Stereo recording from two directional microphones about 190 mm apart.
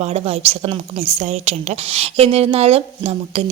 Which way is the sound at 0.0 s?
35° right (ahead or behind).